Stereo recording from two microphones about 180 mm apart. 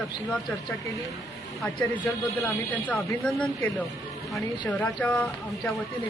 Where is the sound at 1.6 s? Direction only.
5° left (ahead or behind).